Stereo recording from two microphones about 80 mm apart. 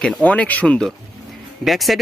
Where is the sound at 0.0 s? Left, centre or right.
Centre.